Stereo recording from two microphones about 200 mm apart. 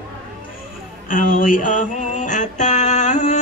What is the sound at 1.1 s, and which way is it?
Music, 45° left (ahead or behind).